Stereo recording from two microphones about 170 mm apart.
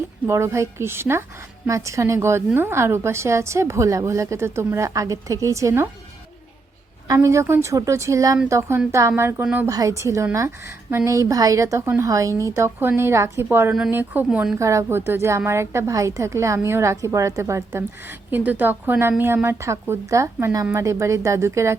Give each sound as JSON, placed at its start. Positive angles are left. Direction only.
{"t": 0.3, "sound": "a woman's voice", "side_deg": -15}
{"t": 7.1, "sound": "a woman's voice", "side_deg": -15}
{"t": 9.6, "sound": "a woman's voice", "side_deg": -20}
{"t": 14.6, "sound": "a woman's voice", "side_deg": -15}